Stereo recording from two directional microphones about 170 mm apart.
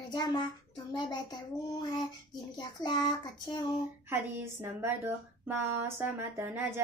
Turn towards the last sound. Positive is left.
turn(degrees=-15)  # may be behind; listen again after turning